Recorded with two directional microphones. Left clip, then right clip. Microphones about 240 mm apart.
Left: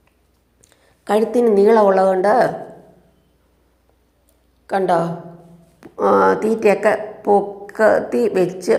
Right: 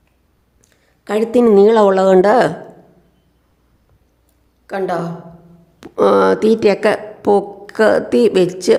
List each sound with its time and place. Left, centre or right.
1.0 s a woman's voice: centre
1.4 s a woman's voice: right
1.6 s speech: right
4.6 s a woman's voice: centre
5.8 s speech: centre